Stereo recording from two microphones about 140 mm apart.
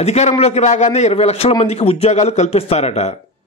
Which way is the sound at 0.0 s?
50° left (ahead or behind).